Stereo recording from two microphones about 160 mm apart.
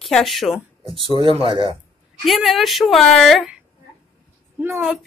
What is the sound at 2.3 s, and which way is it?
Speech, centre (ahead or behind).